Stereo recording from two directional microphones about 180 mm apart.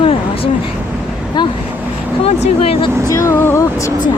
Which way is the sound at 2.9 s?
15° right (ahead or behind).